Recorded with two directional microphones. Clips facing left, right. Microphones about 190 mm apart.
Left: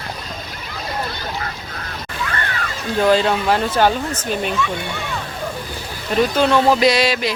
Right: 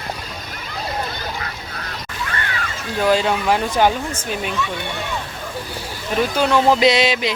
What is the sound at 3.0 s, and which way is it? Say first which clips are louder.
Speech: left 2 dB; 10° right (ahead or behind).